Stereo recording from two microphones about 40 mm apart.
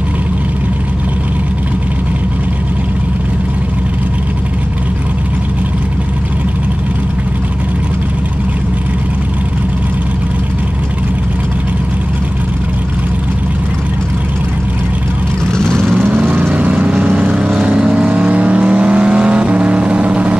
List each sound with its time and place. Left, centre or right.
15.5 s vehicle: centre
15.9 s lawn mower: right
16.5 s vehicle: right
16.9 s vehicle: right
18.3 s vehicle: right